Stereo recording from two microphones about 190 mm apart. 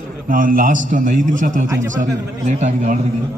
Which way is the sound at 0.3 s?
45° right (ahead or behind).